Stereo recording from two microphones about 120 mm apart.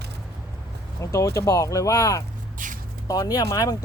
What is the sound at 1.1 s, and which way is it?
Speech, 25° left (ahead or behind).